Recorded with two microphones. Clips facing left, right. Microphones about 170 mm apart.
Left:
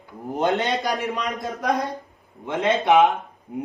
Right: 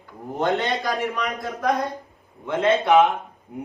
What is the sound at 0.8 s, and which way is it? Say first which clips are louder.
A man's voice: even; 20° left (ahead or behind).